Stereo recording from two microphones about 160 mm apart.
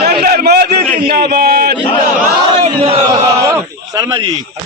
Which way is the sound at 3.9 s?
25° right (ahead or behind).